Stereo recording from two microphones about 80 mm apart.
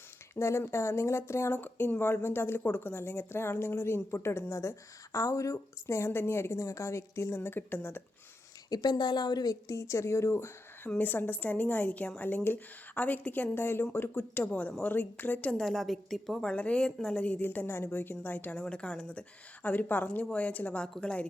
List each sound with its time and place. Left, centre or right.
0.3 s speech: left
8.7 s speech: left
10.8 s a woman's voice: left
15.5 s a woman's voice: centre; by 18.5 s left
18.5 s a woman's voice: centre